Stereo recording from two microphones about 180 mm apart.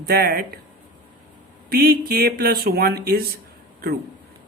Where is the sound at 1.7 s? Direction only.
55° right (ahead or behind).